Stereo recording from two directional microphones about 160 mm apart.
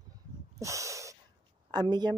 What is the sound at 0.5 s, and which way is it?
Snort, 20° right (ahead or behind).